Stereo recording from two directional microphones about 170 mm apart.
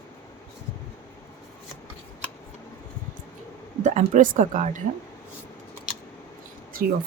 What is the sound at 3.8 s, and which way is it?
Speech, 45° right (ahead or behind).